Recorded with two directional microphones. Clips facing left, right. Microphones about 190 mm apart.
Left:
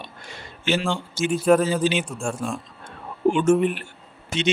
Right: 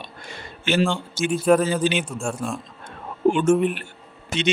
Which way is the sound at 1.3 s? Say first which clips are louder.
Even; centre (ahead or behind).